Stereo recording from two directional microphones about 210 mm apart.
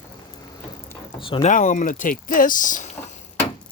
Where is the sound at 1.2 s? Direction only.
25° left (ahead or behind).